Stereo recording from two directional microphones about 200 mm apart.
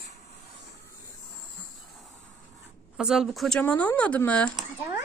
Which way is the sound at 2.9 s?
Centre (ahead or behind).